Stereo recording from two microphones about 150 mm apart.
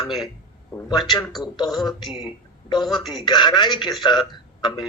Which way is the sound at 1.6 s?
Centre (ahead or behind).